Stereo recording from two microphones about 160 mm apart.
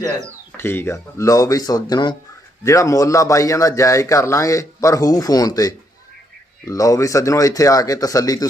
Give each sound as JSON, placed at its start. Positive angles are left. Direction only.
{"t": 0.5, "sound": "a man's voice", "side_deg": 15}